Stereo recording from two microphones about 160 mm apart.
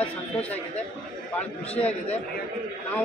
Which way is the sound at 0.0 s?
10° left (ahead or behind).